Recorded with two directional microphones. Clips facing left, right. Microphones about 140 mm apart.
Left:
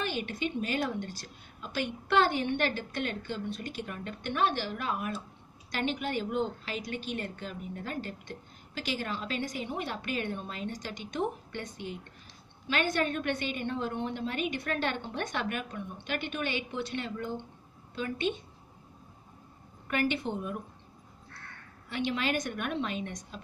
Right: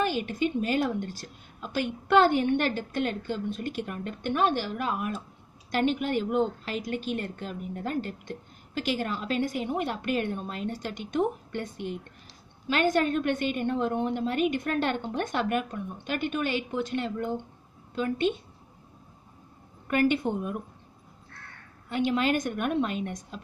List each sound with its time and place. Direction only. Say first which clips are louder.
0.0 s a woman's voice: right 6 dB; 45° right (ahead or behind)
19.9 s a woman's voice: right 6 dB; 45° right (ahead or behind)
21.8 s a woman's voice: right 6 dB; 45° right (ahead or behind)